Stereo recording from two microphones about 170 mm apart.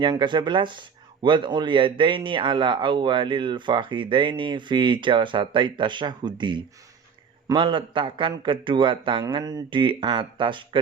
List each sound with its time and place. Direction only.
0.0 s speech: 25° right (ahead or behind)